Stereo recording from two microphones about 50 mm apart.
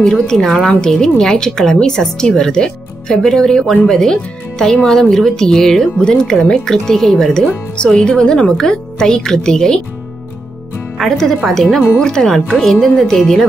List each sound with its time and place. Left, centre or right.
0.2 s speech: centre
7.4 s speech: left
11.0 s speech: centre